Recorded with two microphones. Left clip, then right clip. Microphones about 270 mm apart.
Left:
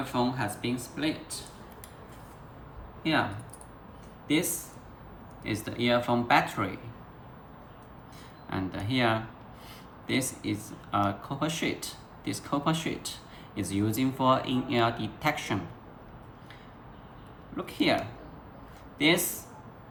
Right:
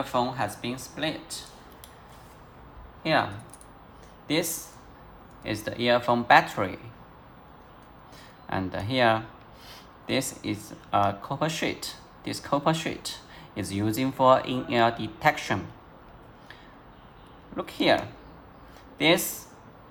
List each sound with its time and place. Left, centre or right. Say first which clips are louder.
0.1 s speech: right 2 dB; right
3.0 s speech: right 3 dB; right
5.4 s speech: right 2 dB; right
8.4 s speech: right 4 dB; right
17.6 s speech: right 4 dB; right
18.9 s speech: right 3 dB; right